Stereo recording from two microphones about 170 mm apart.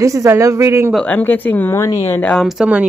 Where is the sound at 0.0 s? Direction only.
20° right (ahead or behind).